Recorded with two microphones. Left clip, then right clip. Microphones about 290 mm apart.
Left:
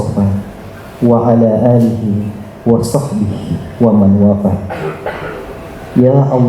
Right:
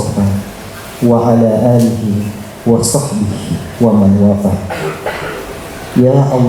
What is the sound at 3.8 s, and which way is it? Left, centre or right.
Speech, left.